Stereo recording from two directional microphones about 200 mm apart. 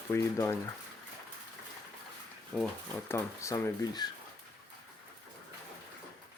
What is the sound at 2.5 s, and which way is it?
Speech, centre (ahead or behind).